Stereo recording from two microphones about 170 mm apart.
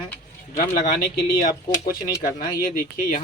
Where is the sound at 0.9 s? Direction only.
55° left (ahead or behind).